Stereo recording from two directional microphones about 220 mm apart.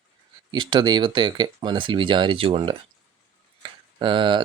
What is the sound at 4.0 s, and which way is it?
Speech, 20° right (ahead or behind).